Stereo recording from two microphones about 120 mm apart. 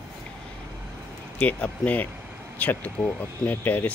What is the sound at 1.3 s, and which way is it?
Speech, 10° left (ahead or behind).